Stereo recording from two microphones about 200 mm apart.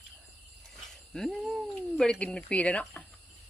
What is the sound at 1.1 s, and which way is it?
Speech, centre (ahead or behind).